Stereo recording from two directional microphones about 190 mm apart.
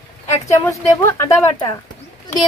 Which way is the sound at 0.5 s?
15° left (ahead or behind).